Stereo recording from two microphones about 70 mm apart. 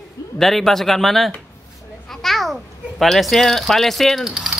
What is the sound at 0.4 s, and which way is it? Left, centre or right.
Speech, centre.